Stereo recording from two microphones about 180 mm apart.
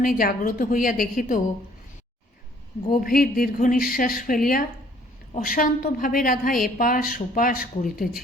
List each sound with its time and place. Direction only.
0.0 s a woman's voice: 50° left (ahead or behind)
2.9 s a woman's voice: 50° left (ahead or behind)